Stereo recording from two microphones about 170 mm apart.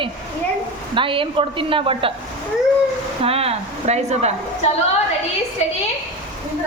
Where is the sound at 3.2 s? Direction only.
35° right (ahead or behind).